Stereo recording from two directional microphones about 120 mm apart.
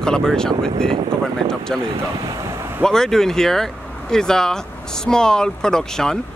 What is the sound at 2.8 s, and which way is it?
Speech, 5° left (ahead or behind).